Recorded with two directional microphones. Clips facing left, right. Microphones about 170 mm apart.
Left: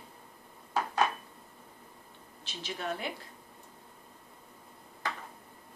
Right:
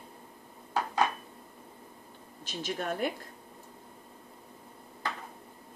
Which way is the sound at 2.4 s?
45° right (ahead or behind).